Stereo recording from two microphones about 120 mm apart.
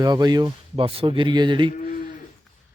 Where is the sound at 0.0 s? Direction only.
35° right (ahead or behind).